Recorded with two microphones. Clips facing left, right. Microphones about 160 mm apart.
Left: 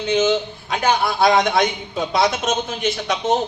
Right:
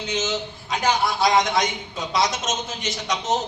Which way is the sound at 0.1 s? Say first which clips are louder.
Left 9 dB; 55° left (ahead or behind).